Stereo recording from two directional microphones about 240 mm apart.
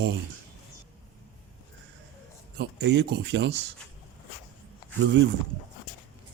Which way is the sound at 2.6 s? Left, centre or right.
Right.